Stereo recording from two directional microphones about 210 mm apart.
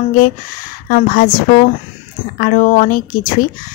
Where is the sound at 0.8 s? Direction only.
45° left (ahead or behind).